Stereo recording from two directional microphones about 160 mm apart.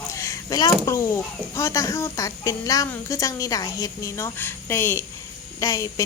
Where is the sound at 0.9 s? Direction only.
20° left (ahead or behind).